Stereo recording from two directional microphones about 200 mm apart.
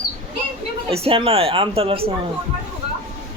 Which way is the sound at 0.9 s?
30° right (ahead or behind).